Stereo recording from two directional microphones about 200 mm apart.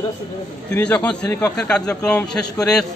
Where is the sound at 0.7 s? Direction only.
5° left (ahead or behind).